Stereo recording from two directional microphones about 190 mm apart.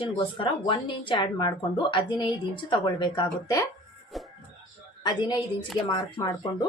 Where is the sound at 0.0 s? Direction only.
25° left (ahead or behind).